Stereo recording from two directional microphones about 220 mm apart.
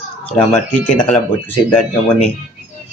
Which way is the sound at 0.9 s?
5° left (ahead or behind).